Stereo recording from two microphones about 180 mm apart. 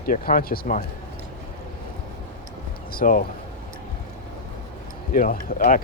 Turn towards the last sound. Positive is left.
turn(degrees=50)  # may be behind; listen again after turning